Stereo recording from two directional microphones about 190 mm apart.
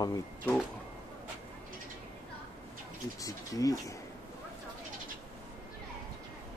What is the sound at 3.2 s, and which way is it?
Speech, 20° left (ahead or behind).